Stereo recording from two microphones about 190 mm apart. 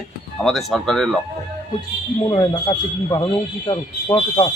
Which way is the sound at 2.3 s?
20° left (ahead or behind).